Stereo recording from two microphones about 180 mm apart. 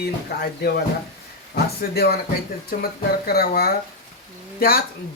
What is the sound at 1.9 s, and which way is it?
Speech, 60° left (ahead or behind).